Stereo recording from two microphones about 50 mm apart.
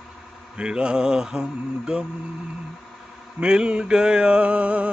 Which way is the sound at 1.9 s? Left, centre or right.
Centre.